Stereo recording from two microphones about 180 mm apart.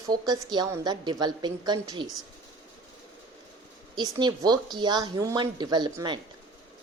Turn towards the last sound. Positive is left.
turn(degrees=-25)  # may be behind; listen again after turning